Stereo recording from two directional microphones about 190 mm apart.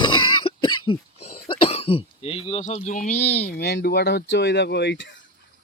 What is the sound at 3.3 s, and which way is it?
Speech, 55° left (ahead or behind).